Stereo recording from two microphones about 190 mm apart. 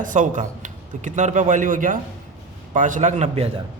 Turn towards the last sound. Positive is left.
turn(degrees=-35)  # may be behind; listen again after turning